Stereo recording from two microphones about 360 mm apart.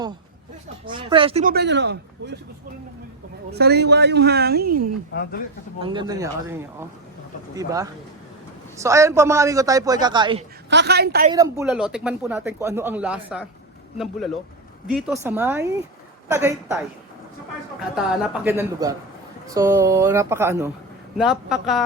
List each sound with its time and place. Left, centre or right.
0.9 s speech: centre
3.5 s speech: right
5.1 s speech: left
5.8 s a man's voice: centre
10.7 s speech: right
11.3 s speech: centre
14.8 s a man's voice: centre
18.4 s a man's voice: centre